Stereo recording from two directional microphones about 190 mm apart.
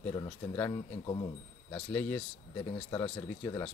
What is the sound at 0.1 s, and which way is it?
Speech, 20° left (ahead or behind).